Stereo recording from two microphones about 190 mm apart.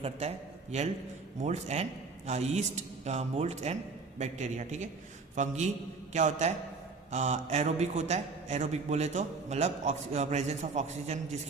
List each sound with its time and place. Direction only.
0.0 s a man's voice: 35° right (ahead or behind)